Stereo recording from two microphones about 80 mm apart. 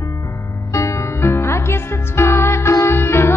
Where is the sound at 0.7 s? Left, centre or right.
Left.